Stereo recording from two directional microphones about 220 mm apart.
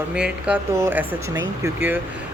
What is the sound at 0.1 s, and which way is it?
Speech, 5° right (ahead or behind).